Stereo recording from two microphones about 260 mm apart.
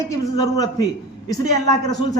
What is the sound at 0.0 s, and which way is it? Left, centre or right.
A man's voice, centre.